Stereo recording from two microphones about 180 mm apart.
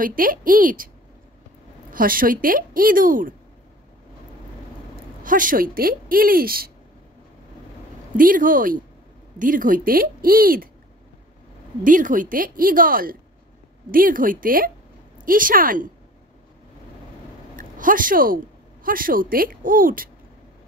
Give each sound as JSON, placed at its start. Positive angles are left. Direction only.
{"t": 0.0, "sound": "a woman's voice", "side_deg": -50}
{"t": 1.9, "sound": "a woman's voice", "side_deg": -50}
{"t": 5.2, "sound": "a woman's voice", "side_deg": -50}
{"t": 8.2, "sound": "a woman's voice", "side_deg": -50}
{"t": 11.8, "sound": "a woman's voice", "side_deg": -45}
{"t": 17.6, "sound": "a woman's voice", "side_deg": -50}